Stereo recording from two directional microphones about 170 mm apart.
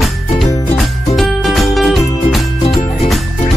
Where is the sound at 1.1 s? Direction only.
Centre (ahead or behind).